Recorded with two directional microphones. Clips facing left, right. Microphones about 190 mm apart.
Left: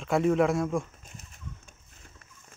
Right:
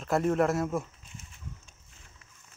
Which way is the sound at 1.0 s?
45° left (ahead or behind).